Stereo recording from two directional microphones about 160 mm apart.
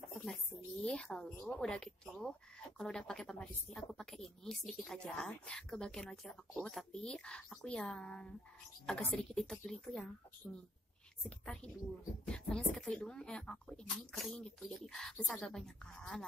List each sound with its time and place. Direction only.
0.8 s a woman's voice: 5° left (ahead or behind)
1.6 s speech: 5° left (ahead or behind)